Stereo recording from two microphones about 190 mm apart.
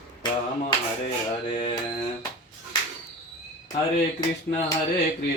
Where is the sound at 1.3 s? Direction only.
30° left (ahead or behind).